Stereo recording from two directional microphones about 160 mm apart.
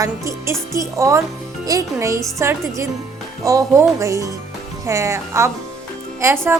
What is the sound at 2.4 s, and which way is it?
Speech, 15° right (ahead or behind).